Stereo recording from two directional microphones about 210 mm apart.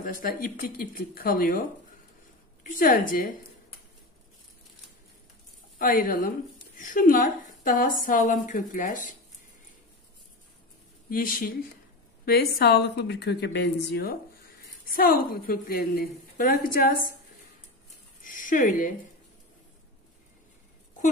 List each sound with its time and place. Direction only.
0.0 s a woman's voice: 40° left (ahead or behind)
5.8 s a woman's voice: 40° left (ahead or behind)
11.1 s a woman's voice: 40° left (ahead or behind)
18.2 s speech: 40° left (ahead or behind)